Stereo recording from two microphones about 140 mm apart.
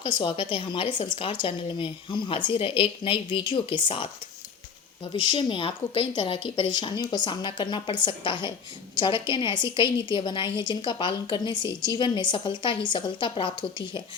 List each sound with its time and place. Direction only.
0.0 s a woman's voice: 35° left (ahead or behind)
5.3 s a woman's voice: 35° left (ahead or behind)